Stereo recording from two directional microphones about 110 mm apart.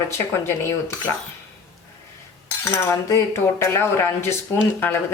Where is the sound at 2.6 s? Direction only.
25° left (ahead or behind).